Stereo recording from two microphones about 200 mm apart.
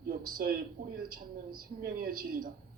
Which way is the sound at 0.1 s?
45° right (ahead or behind).